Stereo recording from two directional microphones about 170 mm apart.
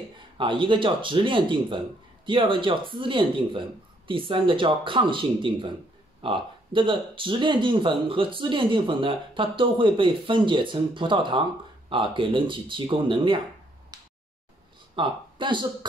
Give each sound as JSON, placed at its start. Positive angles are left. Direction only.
{"t": 0.4, "sound": "speech", "side_deg": -30}
{"t": 15.0, "sound": "speech", "side_deg": -30}